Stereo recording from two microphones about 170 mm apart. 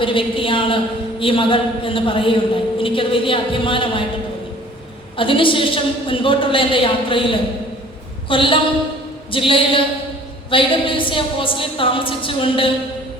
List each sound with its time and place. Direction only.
0.0 s a man's voice: 30° left (ahead or behind)
5.1 s a man's voice: 30° left (ahead or behind)